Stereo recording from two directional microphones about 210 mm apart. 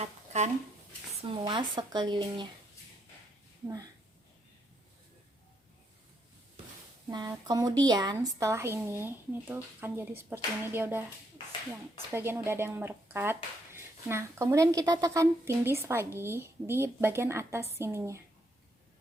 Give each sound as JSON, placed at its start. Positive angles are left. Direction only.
{"t": 0.0, "sound": "a sound", "side_deg": -30}
{"t": 1.2, "sound": "speech", "side_deg": -20}
{"t": 7.1, "sound": "speech", "side_deg": -20}
{"t": 12.1, "sound": "speech", "side_deg": -10}